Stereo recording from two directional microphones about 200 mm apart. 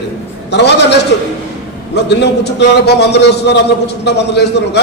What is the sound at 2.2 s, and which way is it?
A man's voice, 55° left (ahead or behind).